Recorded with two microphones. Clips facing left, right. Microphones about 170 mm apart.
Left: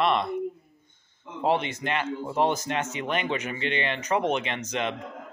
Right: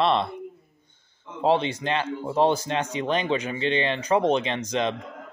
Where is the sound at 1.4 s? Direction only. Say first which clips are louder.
Right 3 dB; 30° right (ahead or behind).